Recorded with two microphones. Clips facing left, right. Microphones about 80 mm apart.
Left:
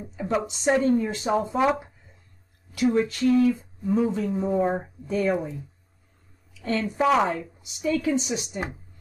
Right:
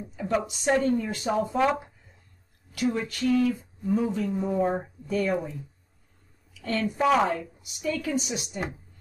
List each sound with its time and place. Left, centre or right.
0.0 s a sound: left
0.8 s a woman's voice: left
2.7 s a woman's voice: left
6.6 s a woman's voice: left
7.0 s speech: centre
7.2 s a woman's voice: left